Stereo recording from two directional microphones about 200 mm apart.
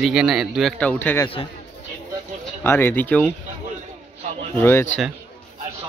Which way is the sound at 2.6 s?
10° left (ahead or behind).